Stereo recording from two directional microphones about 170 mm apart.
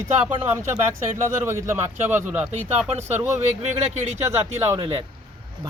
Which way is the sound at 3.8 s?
40° right (ahead or behind).